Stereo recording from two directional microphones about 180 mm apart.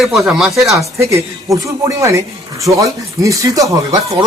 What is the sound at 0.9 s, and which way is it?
A woman's voice, 15° right (ahead or behind).